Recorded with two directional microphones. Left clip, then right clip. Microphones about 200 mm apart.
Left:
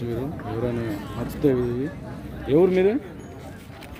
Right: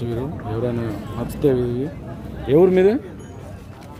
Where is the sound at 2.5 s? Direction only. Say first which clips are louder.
Right 4 dB; 20° right (ahead or behind).